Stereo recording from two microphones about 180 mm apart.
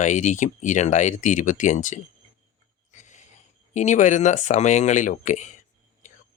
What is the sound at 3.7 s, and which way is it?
Speech, 40° left (ahead or behind).